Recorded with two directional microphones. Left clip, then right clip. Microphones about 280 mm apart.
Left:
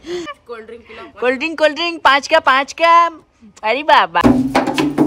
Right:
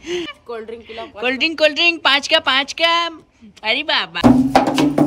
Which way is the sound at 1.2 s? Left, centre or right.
Centre.